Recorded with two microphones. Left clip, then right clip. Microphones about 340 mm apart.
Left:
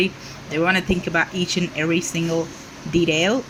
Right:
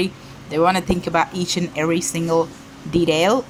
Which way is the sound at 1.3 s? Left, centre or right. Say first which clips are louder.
Even; centre.